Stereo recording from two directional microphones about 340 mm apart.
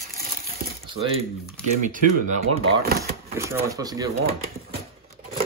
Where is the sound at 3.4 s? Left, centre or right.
Centre.